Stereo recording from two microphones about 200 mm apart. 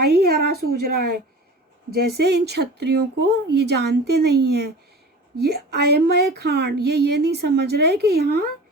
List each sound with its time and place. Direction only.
0.2 s a woman's voice: 50° right (ahead or behind)